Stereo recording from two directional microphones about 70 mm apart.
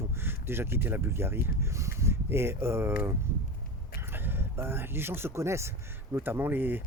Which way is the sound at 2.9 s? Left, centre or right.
Right.